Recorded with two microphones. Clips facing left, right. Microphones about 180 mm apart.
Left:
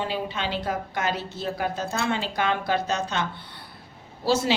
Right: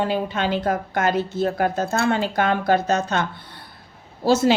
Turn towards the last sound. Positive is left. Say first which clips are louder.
# right 6 dB
turn(degrees=-45)  # may be behind; listen again after turning